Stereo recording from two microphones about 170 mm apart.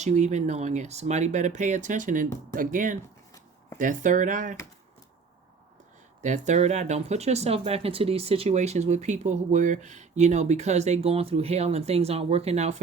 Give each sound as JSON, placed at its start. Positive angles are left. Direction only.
{"t": 0.0, "sound": "speech", "side_deg": -40}
{"t": 6.2, "sound": "speech", "side_deg": -45}